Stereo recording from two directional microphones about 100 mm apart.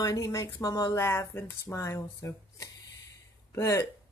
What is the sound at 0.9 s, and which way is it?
Speech, 30° left (ahead or behind).